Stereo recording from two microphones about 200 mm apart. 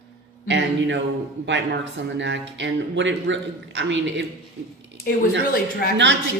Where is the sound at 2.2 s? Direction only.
65° right (ahead or behind).